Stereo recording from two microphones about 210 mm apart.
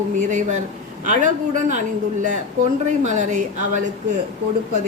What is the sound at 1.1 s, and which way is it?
Speech, 35° right (ahead or behind).